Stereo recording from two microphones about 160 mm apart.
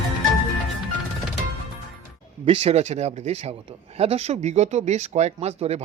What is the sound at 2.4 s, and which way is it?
Speech, 35° right (ahead or behind).